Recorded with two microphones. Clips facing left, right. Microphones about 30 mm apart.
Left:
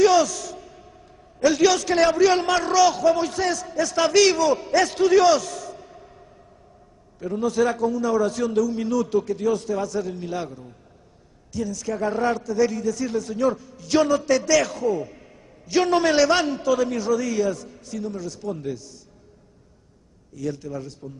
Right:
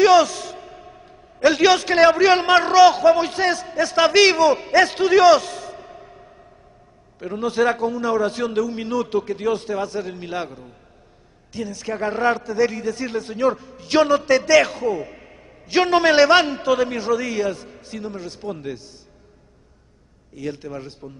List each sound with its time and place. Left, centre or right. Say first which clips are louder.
0.0 s a man's voice: right 3 dB; right
20.3 s a man's voice: even; right